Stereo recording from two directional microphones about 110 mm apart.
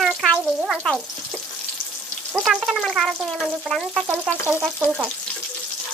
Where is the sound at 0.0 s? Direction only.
5° right (ahead or behind).